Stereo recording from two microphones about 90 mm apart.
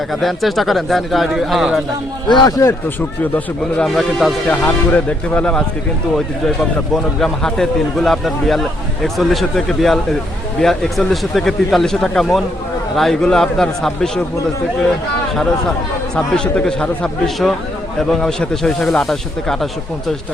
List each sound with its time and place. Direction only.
0.1 s speech: centre (ahead or behind)
2.3 s speech: 50° left (ahead or behind)
3.8 s speech: centre (ahead or behind)
4.4 s speech: 20° left (ahead or behind)
6.9 s speech: 5° left (ahead or behind)
16.1 s speech: 10° left (ahead or behind)